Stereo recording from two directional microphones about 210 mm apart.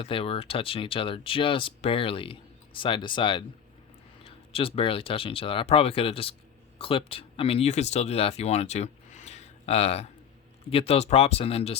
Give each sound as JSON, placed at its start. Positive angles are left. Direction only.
{"t": 0.0, "sound": "speech", "side_deg": 25}